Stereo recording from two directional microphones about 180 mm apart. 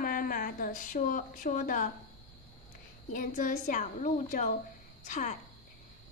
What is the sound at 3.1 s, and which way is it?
A woman's voice, 45° left (ahead or behind).